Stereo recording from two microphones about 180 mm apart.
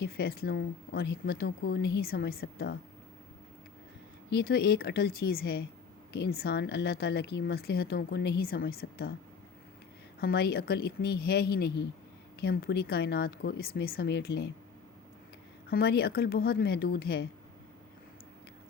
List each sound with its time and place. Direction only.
0.0 s speech: 60° left (ahead or behind)
4.3 s speech: 65° left (ahead or behind)
10.2 s speech: 65° left (ahead or behind)
15.7 s speech: 60° left (ahead or behind)